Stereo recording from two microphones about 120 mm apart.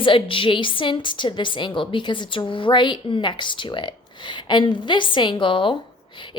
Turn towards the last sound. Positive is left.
turn(degrees=45)  # may be behind; listen again after turning